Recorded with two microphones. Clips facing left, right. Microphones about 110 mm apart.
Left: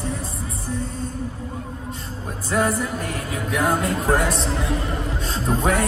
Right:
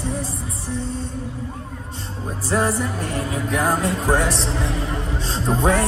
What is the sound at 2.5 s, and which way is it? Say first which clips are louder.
Music: even; 35° right (ahead or behind).